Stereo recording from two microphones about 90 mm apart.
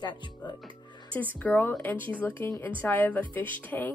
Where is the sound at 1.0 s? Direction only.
20° left (ahead or behind).